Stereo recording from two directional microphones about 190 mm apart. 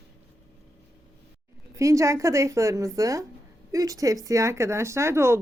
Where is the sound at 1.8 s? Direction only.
15° right (ahead or behind).